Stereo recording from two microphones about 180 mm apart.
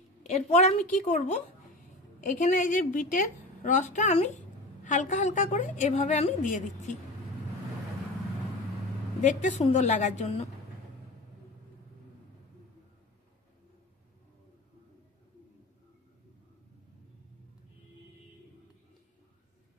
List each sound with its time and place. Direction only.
0.3 s a woman's voice: 40° left (ahead or behind)
9.2 s a woman's voice: 40° left (ahead or behind)